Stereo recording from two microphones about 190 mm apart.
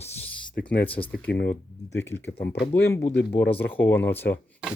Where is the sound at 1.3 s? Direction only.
65° left (ahead or behind).